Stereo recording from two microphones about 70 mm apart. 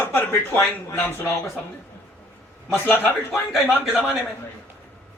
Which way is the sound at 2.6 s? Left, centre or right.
Left.